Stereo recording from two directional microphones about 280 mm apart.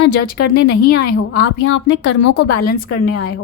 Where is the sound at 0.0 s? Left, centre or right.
Left.